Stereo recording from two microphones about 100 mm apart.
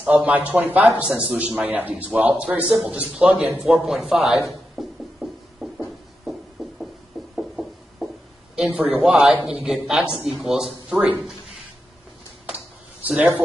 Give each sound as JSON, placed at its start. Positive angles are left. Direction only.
{"t": 0.0, "sound": "a man's voice", "side_deg": -15}
{"t": 3.6, "sound": "a man's voice", "side_deg": 0}
{"t": 4.7, "sound": "music", "side_deg": 0}
{"t": 6.6, "sound": "heart murmur", "side_deg": -5}
{"t": 7.3, "sound": "a sound", "side_deg": 0}
{"t": 8.5, "sound": "a man's voice", "side_deg": -15}